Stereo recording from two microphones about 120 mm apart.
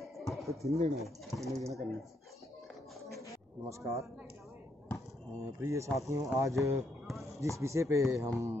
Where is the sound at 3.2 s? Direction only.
25° right (ahead or behind).